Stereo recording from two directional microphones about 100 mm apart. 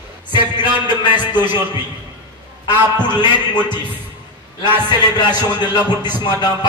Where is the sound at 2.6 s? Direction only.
45° left (ahead or behind).